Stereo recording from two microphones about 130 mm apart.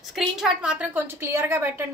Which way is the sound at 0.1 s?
5° right (ahead or behind).